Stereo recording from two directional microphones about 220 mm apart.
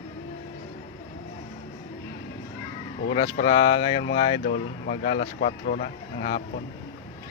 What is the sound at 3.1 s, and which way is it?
Speech, 25° left (ahead or behind).